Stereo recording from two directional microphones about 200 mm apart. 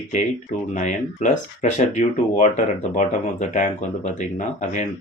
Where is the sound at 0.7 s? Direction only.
40° left (ahead or behind).